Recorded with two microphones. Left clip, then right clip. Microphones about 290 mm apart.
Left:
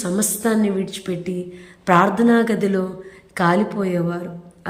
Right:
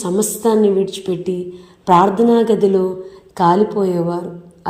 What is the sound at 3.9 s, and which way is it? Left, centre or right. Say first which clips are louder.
Speech: right 4 dB; centre.